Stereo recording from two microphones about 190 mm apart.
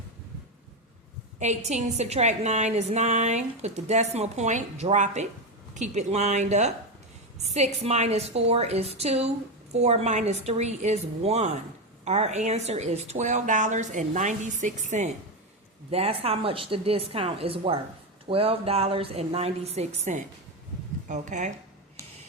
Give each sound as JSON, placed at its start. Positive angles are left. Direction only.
{"t": 1.4, "sound": "a woman's voice", "side_deg": -35}